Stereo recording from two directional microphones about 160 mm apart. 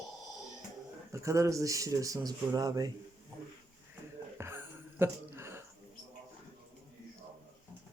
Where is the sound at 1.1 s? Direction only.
20° right (ahead or behind).